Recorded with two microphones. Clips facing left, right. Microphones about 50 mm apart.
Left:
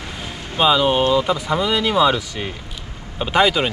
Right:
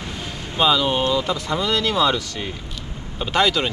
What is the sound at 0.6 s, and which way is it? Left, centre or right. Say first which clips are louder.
Speech: left 3 dB; centre.